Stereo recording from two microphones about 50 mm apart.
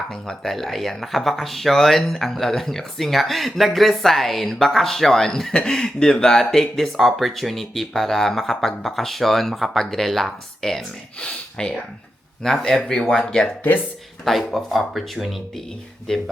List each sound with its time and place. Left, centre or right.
0.1 s speech: centre
11.2 s speech: centre
14.3 s speech: centre
16.1 s speech: centre